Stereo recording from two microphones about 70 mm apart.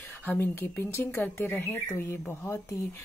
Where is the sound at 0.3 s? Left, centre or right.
Left.